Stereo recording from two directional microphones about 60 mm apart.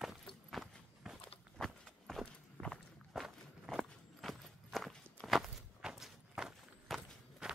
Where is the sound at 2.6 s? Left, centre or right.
Right.